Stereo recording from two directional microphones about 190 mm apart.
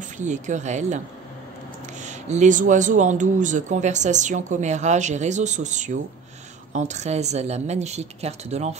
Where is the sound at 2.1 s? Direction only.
40° right (ahead or behind).